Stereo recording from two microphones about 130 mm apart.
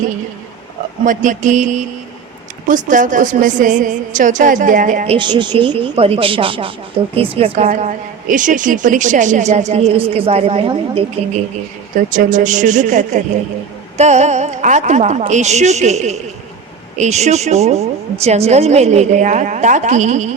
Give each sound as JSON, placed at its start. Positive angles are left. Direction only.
{"t": 1.0, "sound": "a woman's voice", "side_deg": -80}
{"t": 5.0, "sound": "speech", "side_deg": -40}
{"t": 7.5, "sound": "a woman's voice", "side_deg": -90}
{"t": 12.0, "sound": "a woman's voice", "side_deg": -90}